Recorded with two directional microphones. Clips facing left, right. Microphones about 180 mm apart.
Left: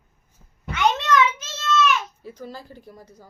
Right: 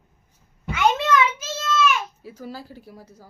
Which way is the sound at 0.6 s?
5° right (ahead or behind).